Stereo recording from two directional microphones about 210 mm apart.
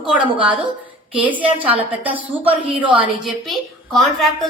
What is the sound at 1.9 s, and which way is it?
A woman's voice, 5° right (ahead or behind).